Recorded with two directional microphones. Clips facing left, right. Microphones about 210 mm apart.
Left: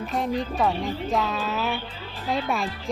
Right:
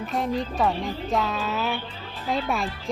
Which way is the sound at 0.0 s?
Centre (ahead or behind).